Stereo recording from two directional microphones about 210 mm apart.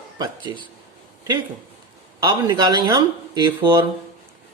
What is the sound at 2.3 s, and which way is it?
Speech, 20° right (ahead or behind).